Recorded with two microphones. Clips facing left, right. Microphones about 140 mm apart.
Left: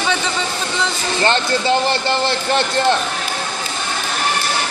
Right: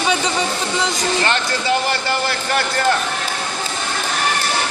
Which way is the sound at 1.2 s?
30° left (ahead or behind).